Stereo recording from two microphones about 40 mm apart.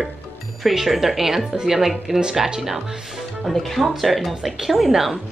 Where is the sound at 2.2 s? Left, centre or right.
Centre.